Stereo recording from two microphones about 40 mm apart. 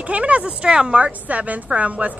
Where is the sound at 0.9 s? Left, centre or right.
Right.